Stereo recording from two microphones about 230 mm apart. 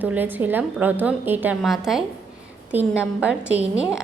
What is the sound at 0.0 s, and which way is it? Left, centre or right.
A woman's voice, centre.